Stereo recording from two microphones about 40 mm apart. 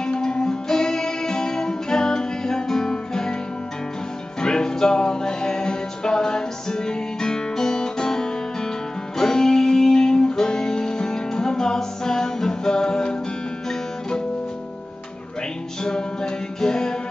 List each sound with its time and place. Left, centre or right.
0.0 s music: centre
4.4 s music: centre
15.8 s music: centre